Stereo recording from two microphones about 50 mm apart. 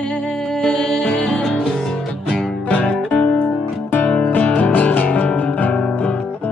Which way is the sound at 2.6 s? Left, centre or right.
Left.